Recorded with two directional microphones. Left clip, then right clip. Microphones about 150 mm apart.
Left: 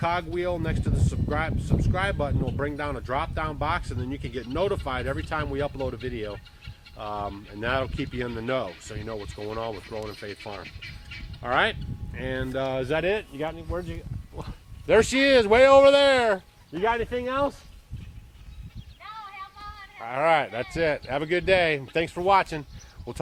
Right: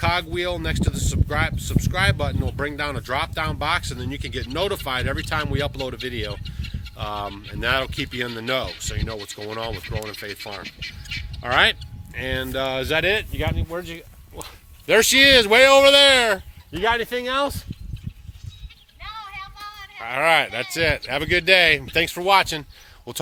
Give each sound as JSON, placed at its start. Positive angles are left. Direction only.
{"t": 0.0, "sound": "speech", "side_deg": -10}
{"t": 9.0, "sound": "speech", "side_deg": -25}
{"t": 11.4, "sound": "speech", "side_deg": -20}
{"t": 14.8, "sound": "speech", "side_deg": 0}
{"t": 16.7, "sound": "speech", "side_deg": -10}
{"t": 19.0, "sound": "music", "side_deg": -35}
{"t": 20.1, "sound": "speech", "side_deg": 0}